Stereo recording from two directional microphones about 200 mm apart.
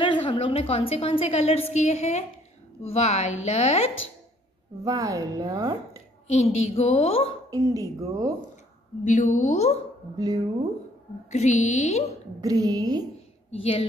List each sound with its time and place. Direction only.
0.0 s a woman's voice: 25° left (ahead or behind)
4.8 s speech: 15° right (ahead or behind)
6.2 s a woman's voice: 35° left (ahead or behind)
7.5 s speech: 15° right (ahead or behind)
9.0 s a woman's voice: 35° left (ahead or behind)
10.1 s a woman's voice: 20° right (ahead or behind)
11.2 s a woman's voice: 35° left (ahead or behind)
12.4 s a woman's voice: 20° right (ahead or behind)
13.5 s a woman's voice: 30° left (ahead or behind)